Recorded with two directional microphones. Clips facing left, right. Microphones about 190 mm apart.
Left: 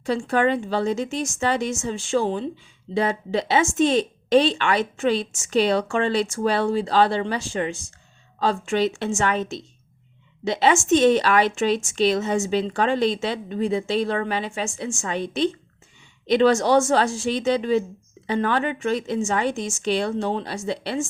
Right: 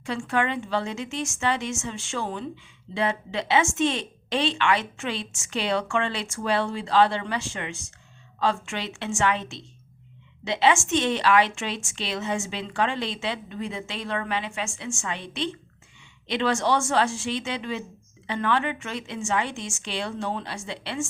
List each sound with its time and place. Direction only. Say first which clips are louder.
0.0 s speech: left 5 dB; 35° left (ahead or behind)